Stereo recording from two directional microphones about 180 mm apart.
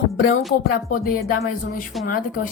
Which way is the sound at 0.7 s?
55° left (ahead or behind).